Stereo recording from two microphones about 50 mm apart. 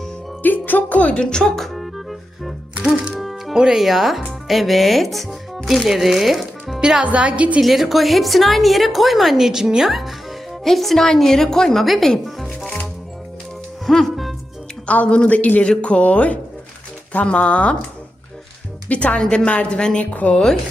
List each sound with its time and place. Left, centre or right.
0.4 s music: left
1.1 s music: centre
3.5 s speech: centre
7.0 s speech: right
7.6 s a woman's voice: centre
12.5 s music: centre
13.8 s music: centre
14.8 s a man's voice: left
15.6 s a man's voice: left
18.9 s a man's voice: left; by 20.6 s centre